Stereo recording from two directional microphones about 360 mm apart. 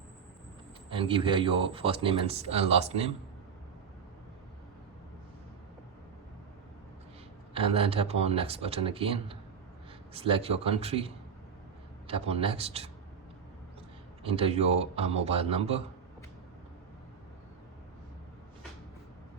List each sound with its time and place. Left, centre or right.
0.9 s speech: centre
7.5 s speech: centre
14.3 s speech: centre